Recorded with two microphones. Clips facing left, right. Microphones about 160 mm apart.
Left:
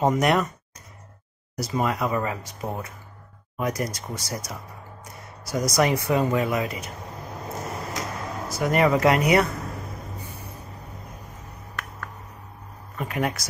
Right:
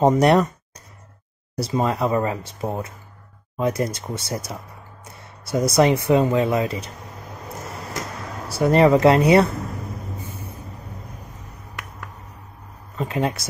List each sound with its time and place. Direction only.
0.0 s speech: 35° right (ahead or behind)
1.6 s speech: 30° right (ahead or behind)
8.5 s speech: 30° right (ahead or behind)
12.9 s speech: 25° right (ahead or behind)